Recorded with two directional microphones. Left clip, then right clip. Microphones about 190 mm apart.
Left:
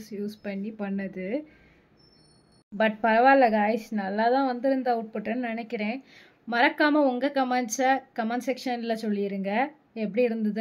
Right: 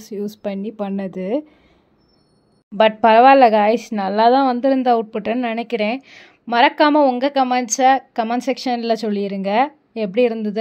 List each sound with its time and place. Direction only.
0.0 s speech: 35° right (ahead or behind)
2.8 s speech: 30° right (ahead or behind)